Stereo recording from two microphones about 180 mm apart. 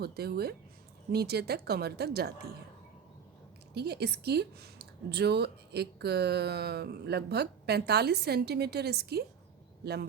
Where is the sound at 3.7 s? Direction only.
65° right (ahead or behind).